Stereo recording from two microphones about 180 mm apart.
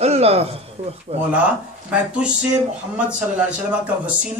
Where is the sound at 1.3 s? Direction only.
5° right (ahead or behind).